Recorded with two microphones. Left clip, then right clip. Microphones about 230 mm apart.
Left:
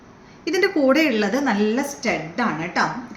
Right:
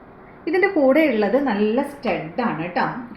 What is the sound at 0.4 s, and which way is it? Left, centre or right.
A woman's voice, left.